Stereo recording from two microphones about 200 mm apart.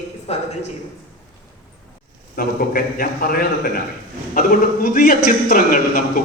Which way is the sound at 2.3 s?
45° left (ahead or behind).